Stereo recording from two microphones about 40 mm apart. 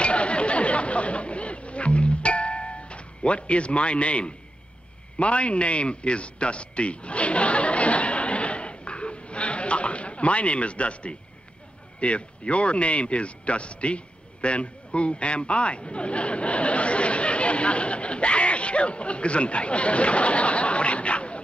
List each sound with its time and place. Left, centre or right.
0.0 s chatter: left
5.2 s a sound: left
12.0 s speech: left